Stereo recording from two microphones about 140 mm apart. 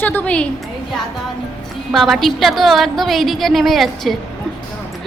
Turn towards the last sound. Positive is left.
turn(degrees=0)  # may be behind; listen again after turning